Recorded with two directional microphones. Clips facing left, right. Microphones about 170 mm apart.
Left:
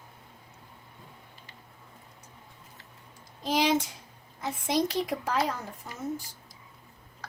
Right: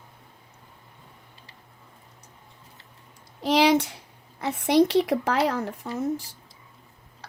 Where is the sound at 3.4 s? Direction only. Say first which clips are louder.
Right 6 dB; 70° right (ahead or behind).